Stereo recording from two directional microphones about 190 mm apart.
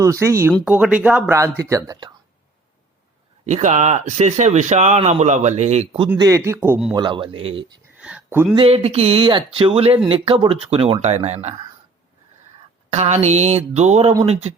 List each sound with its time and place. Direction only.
0.0 s speech: 15° right (ahead or behind)
3.4 s speech: 40° right (ahead or behind)
6.1 s speech: 20° right (ahead or behind)
6.9 s a man's voice: 25° right (ahead or behind)
7.9 s speech: 5° right (ahead or behind)
8.5 s speech: 30° right (ahead or behind)
12.9 s speech: 35° right (ahead or behind)